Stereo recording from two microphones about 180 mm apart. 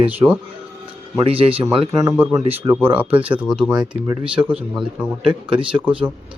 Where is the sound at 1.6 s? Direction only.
20° right (ahead or behind).